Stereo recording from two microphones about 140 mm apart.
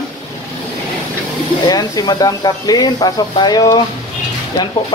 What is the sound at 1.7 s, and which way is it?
Speech, 30° left (ahead or behind).